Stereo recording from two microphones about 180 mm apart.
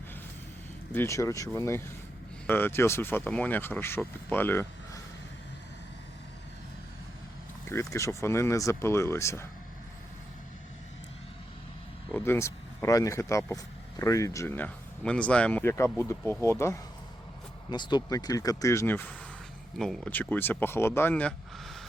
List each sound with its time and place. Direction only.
0.9 s speech: 15° left (ahead or behind)
7.7 s speech: 15° left (ahead or behind)
12.1 s speech: 15° left (ahead or behind)